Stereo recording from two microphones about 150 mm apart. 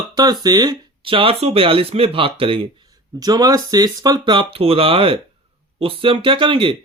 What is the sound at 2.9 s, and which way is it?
Speech, 25° right (ahead or behind).